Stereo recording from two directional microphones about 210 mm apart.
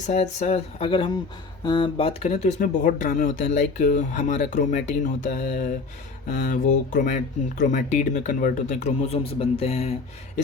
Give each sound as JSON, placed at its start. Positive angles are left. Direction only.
{"t": 0.0, "sound": "speech", "side_deg": 35}